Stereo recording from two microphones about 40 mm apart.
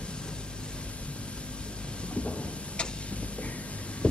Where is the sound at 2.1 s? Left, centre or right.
Left.